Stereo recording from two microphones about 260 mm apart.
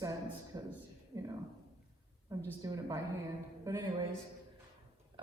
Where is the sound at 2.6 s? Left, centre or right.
Centre.